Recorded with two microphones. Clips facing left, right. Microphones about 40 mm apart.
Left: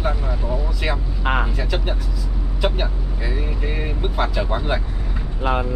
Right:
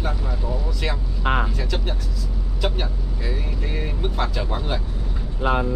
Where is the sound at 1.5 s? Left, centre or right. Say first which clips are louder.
Left 3 dB; centre.